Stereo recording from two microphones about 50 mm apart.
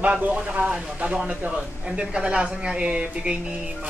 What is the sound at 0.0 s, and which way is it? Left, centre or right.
Speech, right.